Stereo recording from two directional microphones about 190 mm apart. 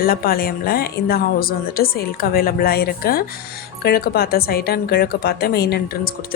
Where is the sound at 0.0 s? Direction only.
50° left (ahead or behind).